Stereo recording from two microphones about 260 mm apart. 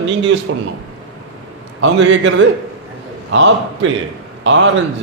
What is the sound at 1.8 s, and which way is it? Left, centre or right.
A man's voice, right.